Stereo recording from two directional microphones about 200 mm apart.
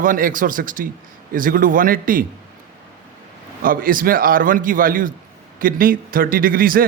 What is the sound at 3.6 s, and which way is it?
A man's voice, 45° right (ahead or behind).